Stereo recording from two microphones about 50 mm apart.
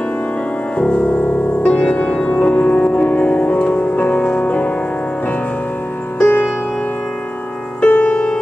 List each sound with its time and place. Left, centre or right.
0.7 s music: left
2.3 s music: left
2.6 s music: centre
3.9 s music: left
4.2 s music: left
6.1 s music: left
7.8 s music: left